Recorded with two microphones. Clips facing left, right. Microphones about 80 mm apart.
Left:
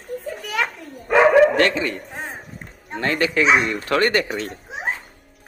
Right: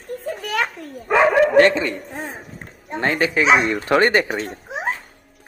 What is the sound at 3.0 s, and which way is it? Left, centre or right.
Speech, right.